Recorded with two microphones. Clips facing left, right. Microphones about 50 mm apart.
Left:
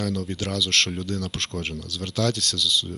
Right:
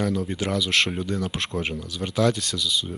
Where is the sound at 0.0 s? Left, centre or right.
Centre.